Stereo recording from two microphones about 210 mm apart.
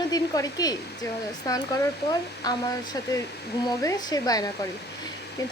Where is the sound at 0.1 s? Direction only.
15° left (ahead or behind).